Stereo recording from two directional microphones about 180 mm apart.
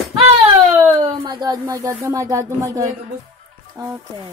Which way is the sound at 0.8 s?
20° right (ahead or behind).